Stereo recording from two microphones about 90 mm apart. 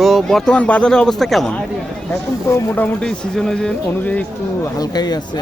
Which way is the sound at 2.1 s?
25° left (ahead or behind).